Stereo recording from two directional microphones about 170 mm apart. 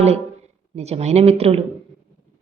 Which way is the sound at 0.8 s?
40° right (ahead or behind).